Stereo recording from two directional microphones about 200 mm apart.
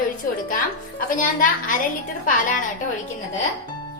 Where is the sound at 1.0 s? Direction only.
45° left (ahead or behind).